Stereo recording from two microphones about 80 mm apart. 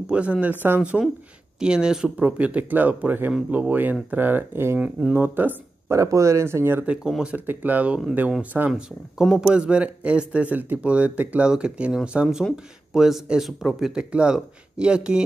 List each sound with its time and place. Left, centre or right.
0.0 s speech: centre
1.6 s speech: centre; by 5.6 s right
5.9 s speech: right
6.9 s speech: centre
7.3 s speech: right
8.7 s speech: centre